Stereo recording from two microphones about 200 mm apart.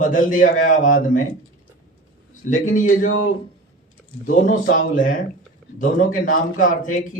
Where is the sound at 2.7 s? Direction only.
40° left (ahead or behind).